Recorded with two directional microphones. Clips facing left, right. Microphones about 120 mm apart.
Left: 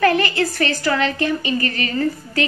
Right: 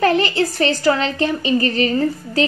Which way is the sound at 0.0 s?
30° right (ahead or behind).